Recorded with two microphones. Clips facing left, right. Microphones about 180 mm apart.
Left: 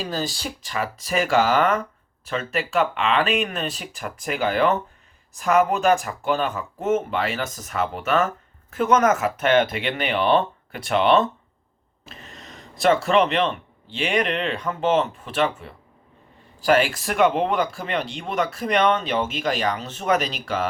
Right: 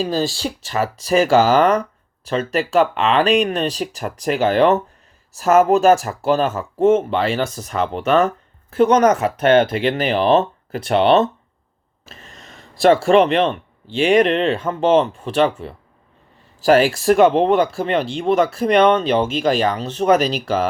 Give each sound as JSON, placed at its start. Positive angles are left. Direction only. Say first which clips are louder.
{"t": 0.0, "sound": "speech", "louder": "right 7 dB", "side_deg": -30}
{"t": 6.7, "sound": "speech", "louder": "right 8 dB", "side_deg": -30}
{"t": 12.0, "sound": "a sound", "louder": "even", "side_deg": -45}
{"t": 12.8, "sound": "speech", "louder": "right 5 dB", "side_deg": -30}
{"t": 13.1, "sound": "speech", "louder": "right 6 dB", "side_deg": -45}